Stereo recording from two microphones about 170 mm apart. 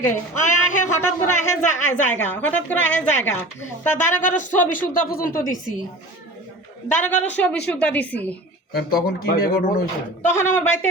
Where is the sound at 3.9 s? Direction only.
50° left (ahead or behind).